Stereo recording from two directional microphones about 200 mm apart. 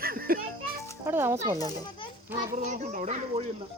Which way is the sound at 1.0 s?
10° right (ahead or behind).